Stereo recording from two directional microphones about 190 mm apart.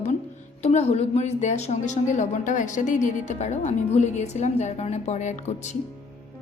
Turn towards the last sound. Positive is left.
turn(degrees=40)  # may be behind; listen again after turning